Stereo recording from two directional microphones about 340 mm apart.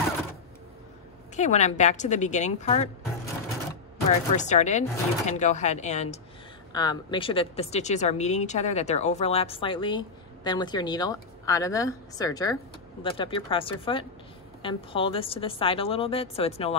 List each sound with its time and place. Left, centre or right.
1.3 s speech: centre
4.1 s a woman's voice: left